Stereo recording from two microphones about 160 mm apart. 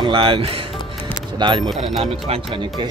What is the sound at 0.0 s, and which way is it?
Speech, 30° right (ahead or behind).